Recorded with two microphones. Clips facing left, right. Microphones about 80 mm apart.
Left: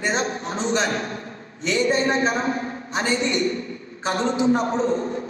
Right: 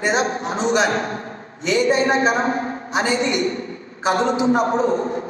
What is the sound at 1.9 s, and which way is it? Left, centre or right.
A man's voice, right.